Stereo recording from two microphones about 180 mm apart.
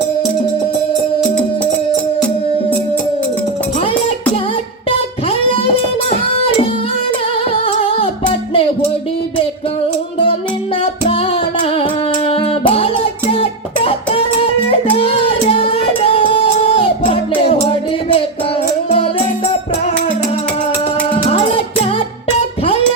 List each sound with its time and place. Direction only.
4.9 s music: 30° left (ahead or behind)
11.0 s music: 35° left (ahead or behind)
21.2 s music: 35° left (ahead or behind)